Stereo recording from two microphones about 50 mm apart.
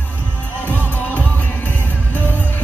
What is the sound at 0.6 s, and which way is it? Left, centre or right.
Music, left.